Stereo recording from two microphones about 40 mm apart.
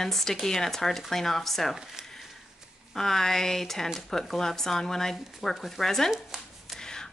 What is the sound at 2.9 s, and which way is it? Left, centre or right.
Speech, centre.